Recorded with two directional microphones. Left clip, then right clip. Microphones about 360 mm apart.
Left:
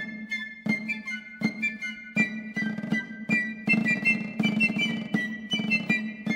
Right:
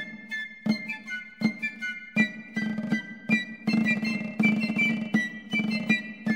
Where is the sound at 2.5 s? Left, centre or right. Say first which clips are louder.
Left 1 dB; centre.